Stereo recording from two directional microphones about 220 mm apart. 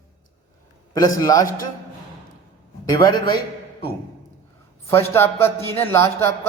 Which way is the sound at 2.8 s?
15° left (ahead or behind).